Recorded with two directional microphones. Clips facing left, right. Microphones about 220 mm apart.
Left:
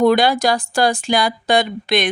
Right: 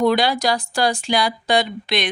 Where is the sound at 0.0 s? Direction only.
50° left (ahead or behind).